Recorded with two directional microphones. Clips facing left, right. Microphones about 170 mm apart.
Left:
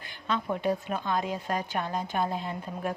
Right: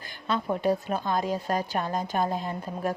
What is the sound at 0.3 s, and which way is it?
Speech, 40° right (ahead or behind).